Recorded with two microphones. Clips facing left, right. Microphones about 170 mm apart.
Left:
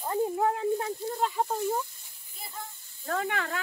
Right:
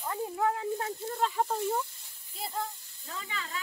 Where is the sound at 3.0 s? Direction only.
65° left (ahead or behind).